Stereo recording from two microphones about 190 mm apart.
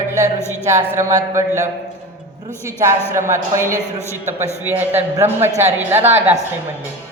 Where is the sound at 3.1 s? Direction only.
15° right (ahead or behind).